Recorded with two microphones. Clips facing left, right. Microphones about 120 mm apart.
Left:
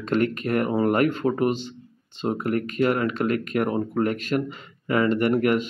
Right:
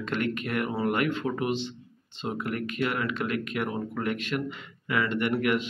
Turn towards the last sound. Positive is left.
turn(degrees=40)  # may be behind; listen again after turning